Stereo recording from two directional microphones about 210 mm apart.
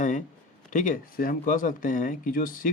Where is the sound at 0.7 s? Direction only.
40° left (ahead or behind).